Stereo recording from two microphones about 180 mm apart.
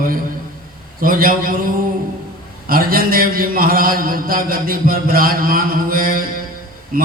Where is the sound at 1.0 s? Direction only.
50° right (ahead or behind).